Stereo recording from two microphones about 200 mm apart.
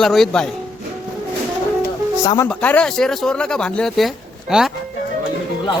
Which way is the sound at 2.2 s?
15° left (ahead or behind).